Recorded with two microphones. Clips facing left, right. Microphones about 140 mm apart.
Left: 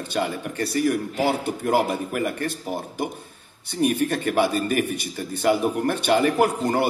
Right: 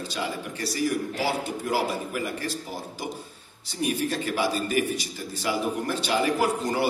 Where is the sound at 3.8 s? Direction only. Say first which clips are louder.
Left 5 dB; 60° left (ahead or behind).